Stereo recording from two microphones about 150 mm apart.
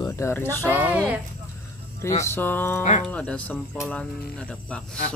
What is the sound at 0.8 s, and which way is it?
Speech, 10° right (ahead or behind).